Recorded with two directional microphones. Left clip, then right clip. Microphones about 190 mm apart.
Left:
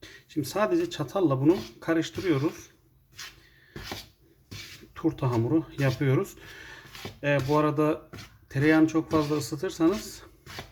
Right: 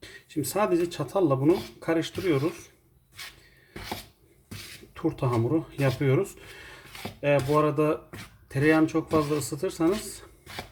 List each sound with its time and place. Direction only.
0.0 s speech: centre (ahead or behind)
4.9 s speech: centre (ahead or behind)